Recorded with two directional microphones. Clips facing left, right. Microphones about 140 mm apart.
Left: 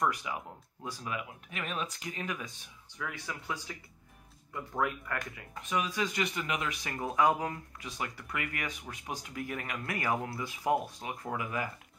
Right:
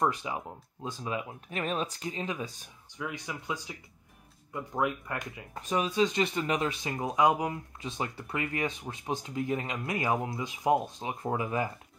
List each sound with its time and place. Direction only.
0.0 s speech: 25° right (ahead or behind)
5.5 s speech: 35° right (ahead or behind); by 7.5 s 15° right (ahead or behind)
7.8 s speech: 25° right (ahead or behind)